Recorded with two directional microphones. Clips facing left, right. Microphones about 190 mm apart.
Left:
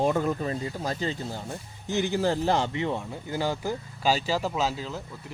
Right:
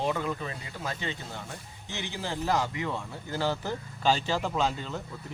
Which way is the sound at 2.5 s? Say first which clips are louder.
Left 3 dB; 25° left (ahead or behind).